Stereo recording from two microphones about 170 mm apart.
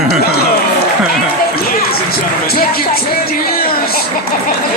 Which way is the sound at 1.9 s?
65° left (ahead or behind).